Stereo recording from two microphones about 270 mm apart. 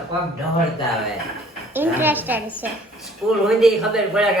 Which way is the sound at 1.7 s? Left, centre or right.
Centre.